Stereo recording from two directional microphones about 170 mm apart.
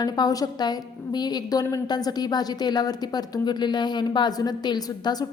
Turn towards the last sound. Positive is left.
turn(degrees=25)  # may be behind; listen again after turning